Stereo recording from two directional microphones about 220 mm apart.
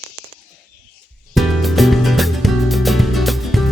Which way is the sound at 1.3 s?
Centre (ahead or behind).